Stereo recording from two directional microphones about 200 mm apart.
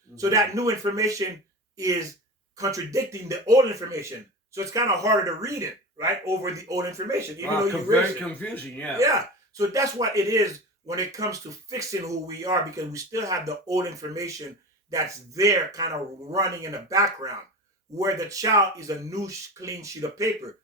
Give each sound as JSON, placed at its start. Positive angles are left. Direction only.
{"t": 0.2, "sound": "speech", "side_deg": -15}
{"t": 8.2, "sound": "speech", "side_deg": 5}
{"t": 9.0, "sound": "speech", "side_deg": -15}